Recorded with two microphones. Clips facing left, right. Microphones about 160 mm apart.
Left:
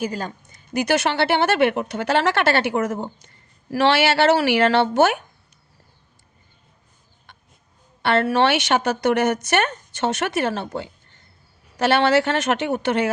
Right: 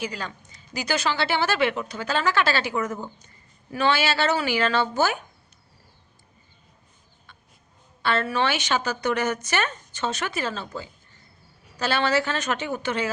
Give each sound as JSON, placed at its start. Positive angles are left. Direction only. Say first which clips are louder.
{"t": 0.0, "sound": "speech", "louder": "left 5 dB", "side_deg": 45}
{"t": 7.3, "sound": "chicken", "louder": "left 3 dB", "side_deg": 70}
{"t": 8.0, "sound": "speech", "louder": "left 6 dB", "side_deg": 65}